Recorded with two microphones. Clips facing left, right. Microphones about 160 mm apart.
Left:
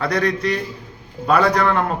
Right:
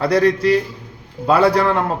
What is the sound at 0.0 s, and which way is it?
A man's voice, 30° right (ahead or behind).